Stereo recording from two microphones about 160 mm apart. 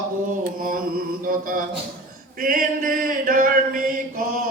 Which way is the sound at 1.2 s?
60° right (ahead or behind).